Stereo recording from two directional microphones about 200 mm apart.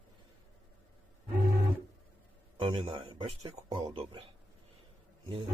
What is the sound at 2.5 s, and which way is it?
Speech, 25° right (ahead or behind).